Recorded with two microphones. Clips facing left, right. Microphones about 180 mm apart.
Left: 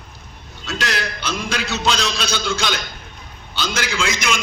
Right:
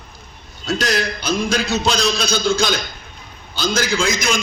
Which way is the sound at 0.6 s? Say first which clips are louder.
Right 5 dB; 40° right (ahead or behind).